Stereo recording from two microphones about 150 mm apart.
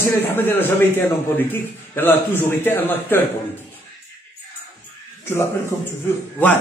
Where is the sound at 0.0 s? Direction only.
15° left (ahead or behind).